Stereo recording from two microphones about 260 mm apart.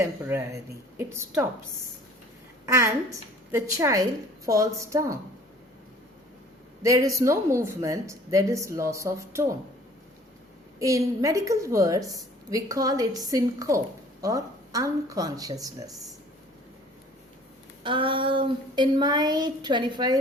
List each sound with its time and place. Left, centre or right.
0.0 s a woman's voice: centre
2.6 s a woman's voice: centre
6.8 s a woman's voice: centre
10.8 s a woman's voice: centre
17.8 s a woman's voice: centre